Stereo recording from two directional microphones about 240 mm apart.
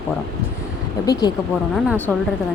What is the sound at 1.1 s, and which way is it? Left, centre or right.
Speech, centre.